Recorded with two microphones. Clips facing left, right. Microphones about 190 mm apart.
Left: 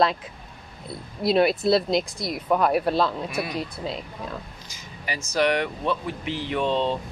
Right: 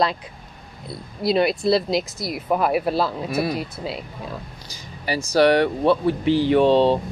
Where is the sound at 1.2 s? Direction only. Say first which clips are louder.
Right 1 dB; centre (ahead or behind).